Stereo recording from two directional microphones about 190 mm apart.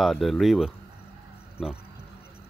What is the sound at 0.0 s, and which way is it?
Speech, centre (ahead or behind).